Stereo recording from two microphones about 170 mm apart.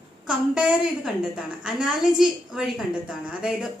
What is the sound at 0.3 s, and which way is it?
A woman's voice, 5° right (ahead or behind).